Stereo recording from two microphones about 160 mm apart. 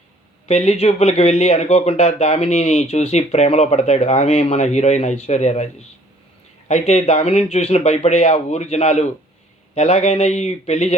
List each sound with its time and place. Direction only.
0.4 s speech: 45° left (ahead or behind)
6.7 s speech: 45° left (ahead or behind)